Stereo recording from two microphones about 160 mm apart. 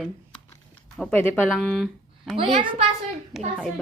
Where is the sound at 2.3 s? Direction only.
35° right (ahead or behind).